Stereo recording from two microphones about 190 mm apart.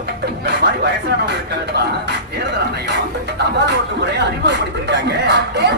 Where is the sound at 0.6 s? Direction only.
60° right (ahead or behind).